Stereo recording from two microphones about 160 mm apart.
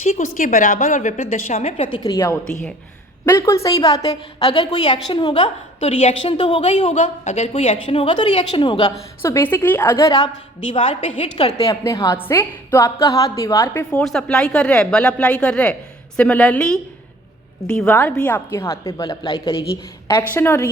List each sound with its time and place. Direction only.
0.0 s a woman's voice: 50° left (ahead or behind)
1.9 s a woman's voice: 25° left (ahead or behind)
2.4 s speech: 5° left (ahead or behind)
3.2 s a woman's voice: 20° left (ahead or behind); by 8.9 s 35° left (ahead or behind)
9.2 s a woman's voice: 15° left (ahead or behind)
10.7 s a woman's voice: 35° left (ahead or behind)
11.5 s a woman's voice: 20° left (ahead or behind)
14.0 s a woman's voice: 5° left (ahead or behind)